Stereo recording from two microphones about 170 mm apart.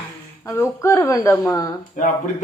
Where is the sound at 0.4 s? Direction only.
15° left (ahead or behind).